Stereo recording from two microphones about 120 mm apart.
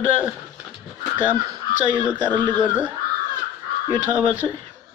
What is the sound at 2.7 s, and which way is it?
Speech, 10° right (ahead or behind).